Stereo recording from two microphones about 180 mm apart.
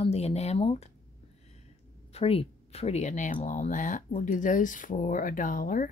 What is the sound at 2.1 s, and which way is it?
Speech, 35° left (ahead or behind).